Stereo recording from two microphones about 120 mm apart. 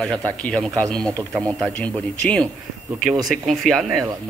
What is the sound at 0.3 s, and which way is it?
A man's voice, 10° left (ahead or behind).